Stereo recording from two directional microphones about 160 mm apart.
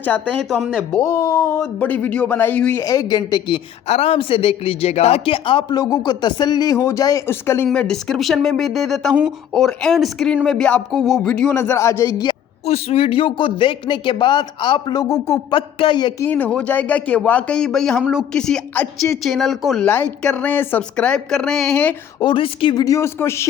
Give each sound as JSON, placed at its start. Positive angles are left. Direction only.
{"t": 0.0, "sound": "speech", "side_deg": 10}
{"t": 1.0, "sound": "speech", "side_deg": 20}
{"t": 3.8, "sound": "speech", "side_deg": 40}
{"t": 7.7, "sound": "speech", "side_deg": 5}
{"t": 12.6, "sound": "speech", "side_deg": 40}
{"t": 16.2, "sound": "speech", "side_deg": 10}
{"t": 22.2, "sound": "speech", "side_deg": 30}